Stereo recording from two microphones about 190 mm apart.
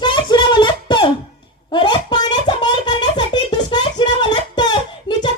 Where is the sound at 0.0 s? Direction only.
25° left (ahead or behind).